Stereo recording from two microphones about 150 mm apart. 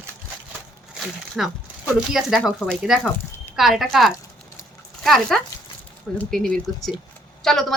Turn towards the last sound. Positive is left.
turn(degrees=0)  # may be behind; listen again after turning